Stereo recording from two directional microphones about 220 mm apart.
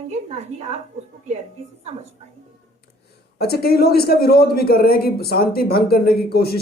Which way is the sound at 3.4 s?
45° left (ahead or behind).